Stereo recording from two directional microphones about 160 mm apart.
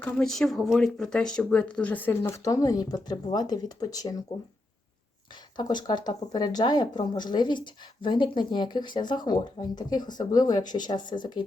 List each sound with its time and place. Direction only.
0.0 s speech: 5° left (ahead or behind); by 4.2 s 20° left (ahead or behind)
5.5 s speech: 25° left (ahead or behind)